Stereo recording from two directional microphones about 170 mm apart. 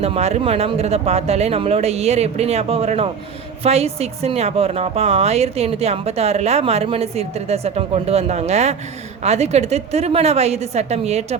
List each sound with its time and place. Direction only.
0.0 s speech: 40° right (ahead or behind)